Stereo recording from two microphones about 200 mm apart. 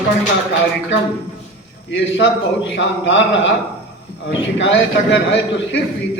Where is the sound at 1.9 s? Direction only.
65° left (ahead or behind).